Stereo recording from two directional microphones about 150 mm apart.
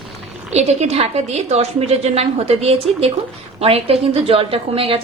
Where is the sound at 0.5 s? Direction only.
45° right (ahead or behind).